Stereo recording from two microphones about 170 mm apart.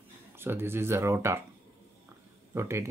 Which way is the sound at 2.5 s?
15° right (ahead or behind).